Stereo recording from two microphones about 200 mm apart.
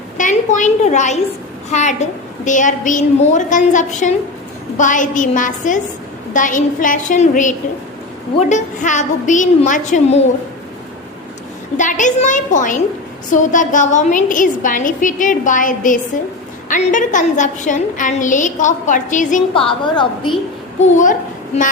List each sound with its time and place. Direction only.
0.2 s a child's voice: 40° left (ahead or behind)
11.8 s a woman's voice: 40° left (ahead or behind)
19.5 s a woman's voice: 25° left (ahead or behind)
20.7 s a child's voice: 40° left (ahead or behind)